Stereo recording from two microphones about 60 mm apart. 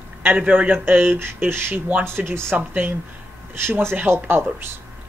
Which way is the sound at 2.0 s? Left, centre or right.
Right.